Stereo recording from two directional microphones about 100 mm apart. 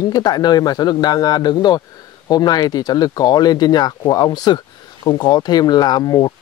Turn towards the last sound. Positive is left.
turn(degrees=40)  # may be behind; listen again after turning